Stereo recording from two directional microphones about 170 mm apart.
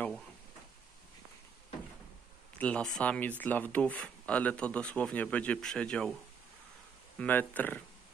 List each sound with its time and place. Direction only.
2.6 s speech: 5° left (ahead or behind)
7.2 s speech: 10° left (ahead or behind)